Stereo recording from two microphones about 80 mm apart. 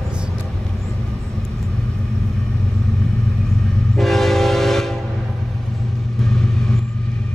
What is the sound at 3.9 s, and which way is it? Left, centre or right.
Train, centre.